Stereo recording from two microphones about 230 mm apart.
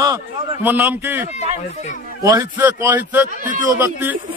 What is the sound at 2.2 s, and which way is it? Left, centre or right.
A man's voice, centre.